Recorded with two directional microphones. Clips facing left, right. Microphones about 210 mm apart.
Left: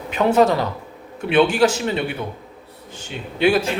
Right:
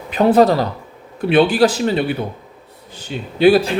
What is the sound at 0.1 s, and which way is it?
Speech, 35° right (ahead or behind).